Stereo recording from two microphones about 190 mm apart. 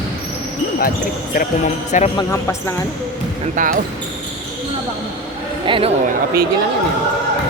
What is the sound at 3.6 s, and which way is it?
Speech, 45° right (ahead or behind).